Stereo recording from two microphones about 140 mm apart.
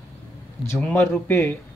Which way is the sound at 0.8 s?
10° left (ahead or behind).